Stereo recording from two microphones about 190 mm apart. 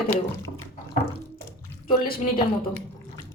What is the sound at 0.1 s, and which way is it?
Speech, 10° left (ahead or behind).